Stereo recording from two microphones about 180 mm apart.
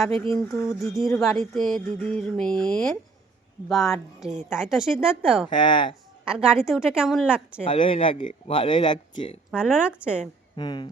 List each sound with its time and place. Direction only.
0.7 s speech: centre (ahead or behind)
5.5 s speech: 25° left (ahead or behind)
6.2 s speech: 5° right (ahead or behind)
7.7 s speech: 30° left (ahead or behind)
9.5 s speech: 5° right (ahead or behind)
10.6 s speech: 25° left (ahead or behind)